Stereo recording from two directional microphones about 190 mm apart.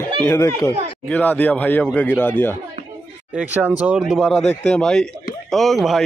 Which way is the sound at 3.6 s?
10° right (ahead or behind).